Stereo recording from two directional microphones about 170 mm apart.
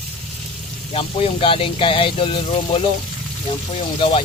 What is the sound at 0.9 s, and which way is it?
Speech, 35° left (ahead or behind).